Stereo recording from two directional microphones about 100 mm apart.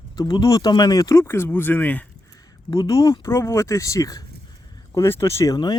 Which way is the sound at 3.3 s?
25° left (ahead or behind).